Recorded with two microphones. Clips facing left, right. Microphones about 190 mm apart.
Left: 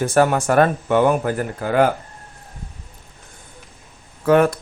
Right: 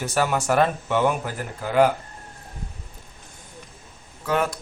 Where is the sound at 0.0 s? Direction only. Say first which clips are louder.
Left 7 dB; 50° left (ahead or behind).